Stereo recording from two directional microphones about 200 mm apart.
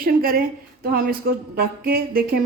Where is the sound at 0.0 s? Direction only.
45° right (ahead or behind).